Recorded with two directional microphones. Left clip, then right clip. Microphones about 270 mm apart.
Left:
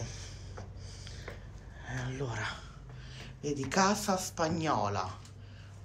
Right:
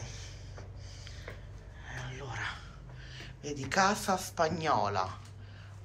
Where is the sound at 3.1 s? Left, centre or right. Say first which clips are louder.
Left 4 dB; centre.